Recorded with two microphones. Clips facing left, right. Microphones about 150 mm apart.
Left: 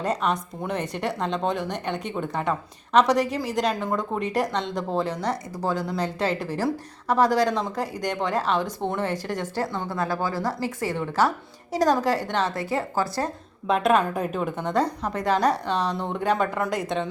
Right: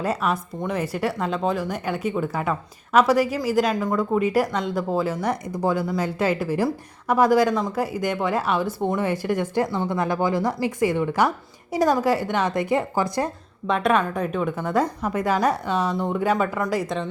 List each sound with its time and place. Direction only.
0.0 s a woman's voice: 5° right (ahead or behind)
13.7 s a woman's voice: centre (ahead or behind)